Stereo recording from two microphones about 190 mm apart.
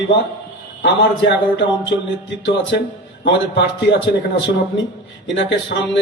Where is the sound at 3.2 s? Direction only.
65° left (ahead or behind).